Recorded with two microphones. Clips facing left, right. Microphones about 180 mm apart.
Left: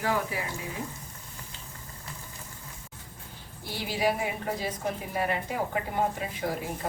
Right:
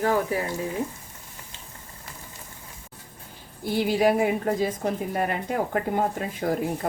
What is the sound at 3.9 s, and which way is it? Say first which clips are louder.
A woman's voice: right 6 dB; 50° right (ahead or behind).